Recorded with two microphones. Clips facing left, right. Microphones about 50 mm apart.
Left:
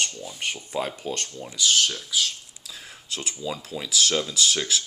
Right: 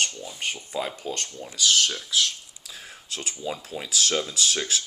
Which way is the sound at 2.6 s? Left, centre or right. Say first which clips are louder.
Even; right.